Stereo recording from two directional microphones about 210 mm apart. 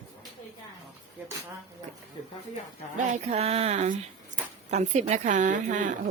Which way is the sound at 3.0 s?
30° right (ahead or behind).